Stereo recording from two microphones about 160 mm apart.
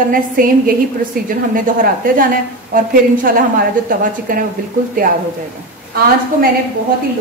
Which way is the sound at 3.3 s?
60° right (ahead or behind).